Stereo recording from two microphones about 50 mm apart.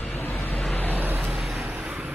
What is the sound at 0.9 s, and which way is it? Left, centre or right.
Vehicle, right.